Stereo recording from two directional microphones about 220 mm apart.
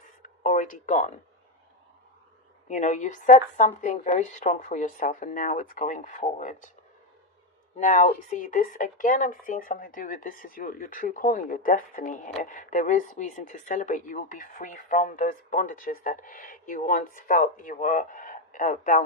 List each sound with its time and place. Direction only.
0.4 s speech: 35° left (ahead or behind)
2.6 s speech: 35° left (ahead or behind)
7.8 s speech: 35° left (ahead or behind)